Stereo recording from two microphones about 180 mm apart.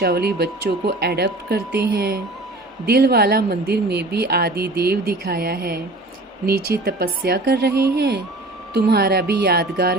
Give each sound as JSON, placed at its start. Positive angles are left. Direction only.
{"t": 0.0, "sound": "a woman's voice", "side_deg": -60}